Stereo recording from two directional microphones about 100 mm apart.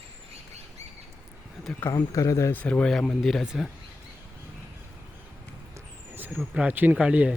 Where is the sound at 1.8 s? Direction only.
35° left (ahead or behind).